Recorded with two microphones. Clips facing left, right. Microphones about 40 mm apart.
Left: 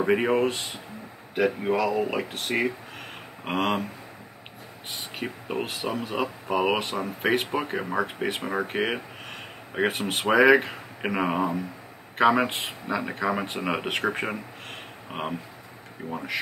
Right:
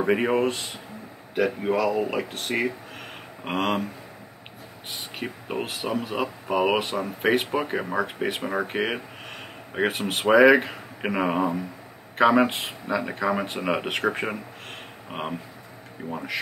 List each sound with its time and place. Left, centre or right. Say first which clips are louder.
0.0 s speech: even; centre
5.1 s speech: even; centre